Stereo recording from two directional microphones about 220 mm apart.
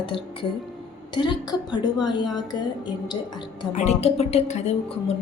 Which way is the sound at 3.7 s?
30° left (ahead or behind).